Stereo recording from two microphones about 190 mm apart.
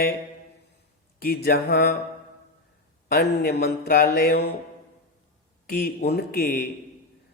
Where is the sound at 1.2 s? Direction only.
50° left (ahead or behind).